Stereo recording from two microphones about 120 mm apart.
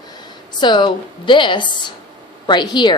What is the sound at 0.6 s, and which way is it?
A woman's voice, 40° left (ahead or behind).